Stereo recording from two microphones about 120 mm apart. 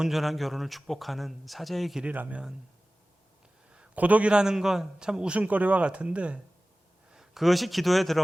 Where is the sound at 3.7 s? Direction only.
10° right (ahead or behind).